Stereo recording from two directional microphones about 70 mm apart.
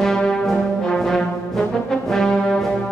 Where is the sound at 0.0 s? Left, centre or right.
Centre.